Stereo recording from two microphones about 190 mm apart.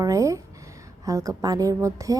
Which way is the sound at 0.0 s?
15° right (ahead or behind).